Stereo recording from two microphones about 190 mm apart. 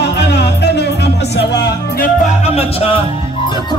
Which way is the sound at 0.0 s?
60° left (ahead or behind).